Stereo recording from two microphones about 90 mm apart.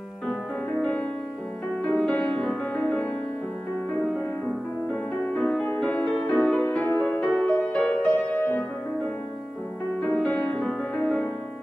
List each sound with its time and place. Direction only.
1.9 s music: 10° left (ahead or behind)
5.3 s music: 15° left (ahead or behind)
10.0 s music: 15° left (ahead or behind)